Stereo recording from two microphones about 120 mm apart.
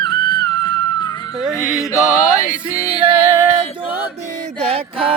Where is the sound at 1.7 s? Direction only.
25° left (ahead or behind).